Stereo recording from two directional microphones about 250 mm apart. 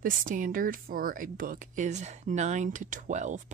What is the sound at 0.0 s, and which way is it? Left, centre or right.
Speech, right.